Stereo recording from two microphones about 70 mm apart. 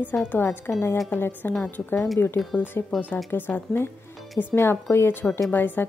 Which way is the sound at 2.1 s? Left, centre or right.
Left.